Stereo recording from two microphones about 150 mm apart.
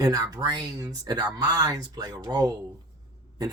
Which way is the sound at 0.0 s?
25° right (ahead or behind).